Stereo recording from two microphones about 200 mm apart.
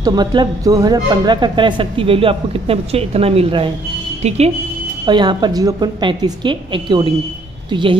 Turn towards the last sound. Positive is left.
turn(degrees=-25)  # may be behind; listen again after turning